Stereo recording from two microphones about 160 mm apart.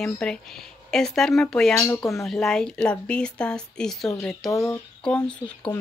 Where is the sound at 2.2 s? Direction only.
5° left (ahead or behind).